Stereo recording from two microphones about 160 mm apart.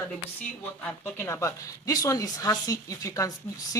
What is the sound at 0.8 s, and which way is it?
Speech, 15° left (ahead or behind).